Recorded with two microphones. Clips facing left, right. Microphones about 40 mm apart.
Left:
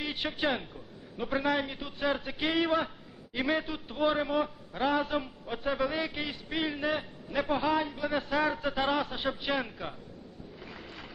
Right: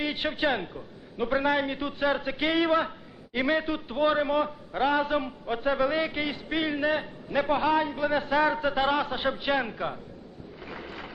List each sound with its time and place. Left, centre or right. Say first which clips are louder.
0.0 s a man's voice: right 4 dB; right
8.4 s a man's voice: right 5 dB; right
10.7 s boat: right 9 dB; right